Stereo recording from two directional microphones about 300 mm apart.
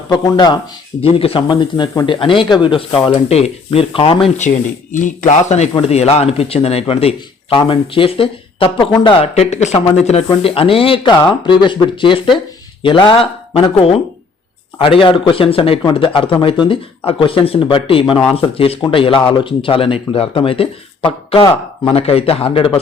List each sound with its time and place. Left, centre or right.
0.1 s speech: centre